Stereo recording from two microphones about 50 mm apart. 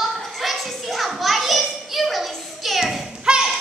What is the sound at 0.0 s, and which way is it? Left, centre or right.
Children playing, centre.